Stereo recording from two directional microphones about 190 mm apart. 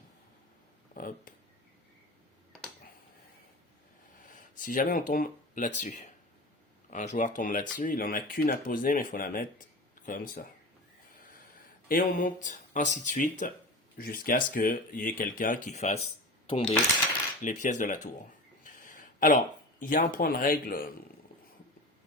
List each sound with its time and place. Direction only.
0.9 s speech: 45° left (ahead or behind)
4.5 s speech: 45° left (ahead or behind)
11.9 s speech: 45° left (ahead or behind)
16.5 s coin: 30° left (ahead or behind)
17.4 s speech: 40° left (ahead or behind)
18.6 s a sound: 45° left (ahead or behind)
19.8 s speech: 45° left (ahead or behind)